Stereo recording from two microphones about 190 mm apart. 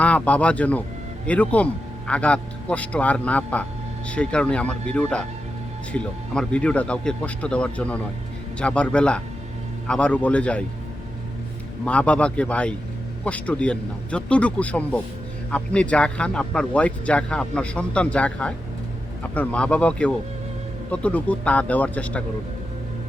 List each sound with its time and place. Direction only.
0.0 s speech: 5° left (ahead or behind)
11.9 s speech: 5° left (ahead or behind)